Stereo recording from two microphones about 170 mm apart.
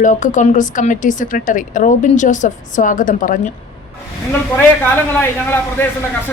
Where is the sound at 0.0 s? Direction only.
45° left (ahead or behind).